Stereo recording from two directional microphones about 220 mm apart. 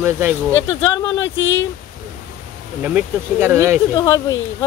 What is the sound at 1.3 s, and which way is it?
Speech, 60° left (ahead or behind).